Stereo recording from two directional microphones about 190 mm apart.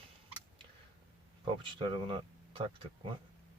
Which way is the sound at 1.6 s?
25° right (ahead or behind).